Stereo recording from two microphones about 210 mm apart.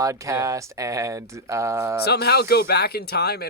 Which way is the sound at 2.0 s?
50° left (ahead or behind).